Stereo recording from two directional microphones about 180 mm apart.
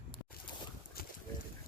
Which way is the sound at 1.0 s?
60° left (ahead or behind).